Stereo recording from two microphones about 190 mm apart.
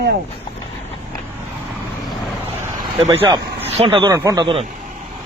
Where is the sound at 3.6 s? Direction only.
30° right (ahead or behind).